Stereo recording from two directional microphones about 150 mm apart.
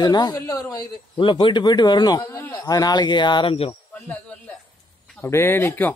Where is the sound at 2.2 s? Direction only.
15° left (ahead or behind).